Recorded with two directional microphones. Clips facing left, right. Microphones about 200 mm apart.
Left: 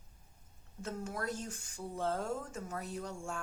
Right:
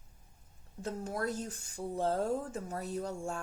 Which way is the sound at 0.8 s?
35° right (ahead or behind).